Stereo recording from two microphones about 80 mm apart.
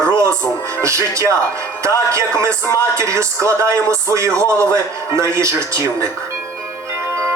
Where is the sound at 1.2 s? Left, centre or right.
Right.